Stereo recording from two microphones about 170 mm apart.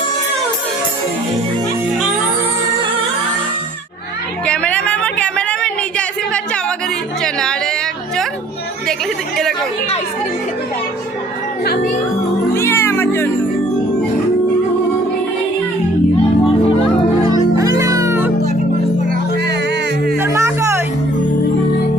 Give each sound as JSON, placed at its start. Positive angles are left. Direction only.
{"t": 4.4, "sound": "a sound", "side_deg": 5}
{"t": 7.2, "sound": "music", "side_deg": 5}
{"t": 12.5, "sound": "cat", "side_deg": 15}
{"t": 17.2, "sound": "music", "side_deg": -20}
{"t": 20.1, "sound": "music", "side_deg": -15}